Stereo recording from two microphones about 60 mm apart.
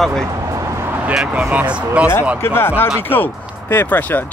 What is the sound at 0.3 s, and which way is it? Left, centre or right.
Vehicle, right.